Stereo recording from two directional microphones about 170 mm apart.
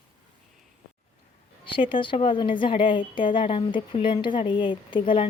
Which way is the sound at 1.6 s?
30° left (ahead or behind).